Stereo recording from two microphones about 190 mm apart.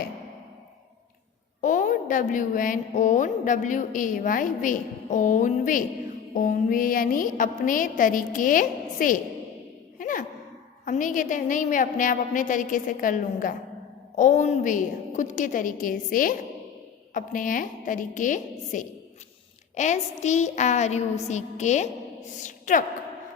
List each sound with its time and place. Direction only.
1.6 s a woman's voice: 40° left (ahead or behind)
10.0 s sigh: 45° left (ahead or behind)
10.8 s a woman's voice: 40° left (ahead or behind)